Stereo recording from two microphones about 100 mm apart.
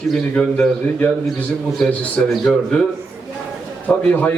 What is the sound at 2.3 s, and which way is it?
Speech, centre (ahead or behind).